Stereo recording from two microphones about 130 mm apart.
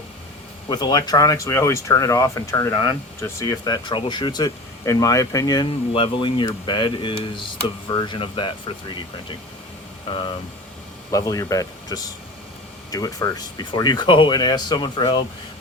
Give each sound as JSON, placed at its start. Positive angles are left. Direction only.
{"t": 0.7, "sound": "speech", "side_deg": 30}
{"t": 3.5, "sound": "speech", "side_deg": 35}
{"t": 5.9, "sound": "speech", "side_deg": 40}
{"t": 10.1, "sound": "speech", "side_deg": 40}
{"t": 11.1, "sound": "speech", "side_deg": 25}